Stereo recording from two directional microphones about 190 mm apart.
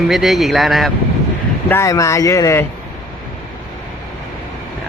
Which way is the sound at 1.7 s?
15° left (ahead or behind).